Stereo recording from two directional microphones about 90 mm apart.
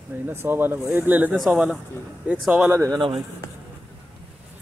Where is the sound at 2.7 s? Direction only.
35° right (ahead or behind).